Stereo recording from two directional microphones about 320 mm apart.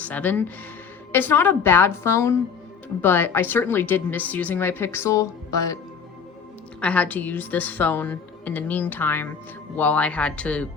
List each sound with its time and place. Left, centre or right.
0.0 s a woman's voice: centre
6.7 s a woman's voice: centre